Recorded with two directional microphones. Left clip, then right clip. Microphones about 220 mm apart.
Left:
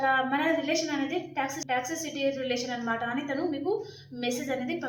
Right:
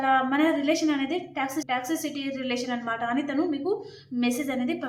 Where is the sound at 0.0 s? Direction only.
35° right (ahead or behind).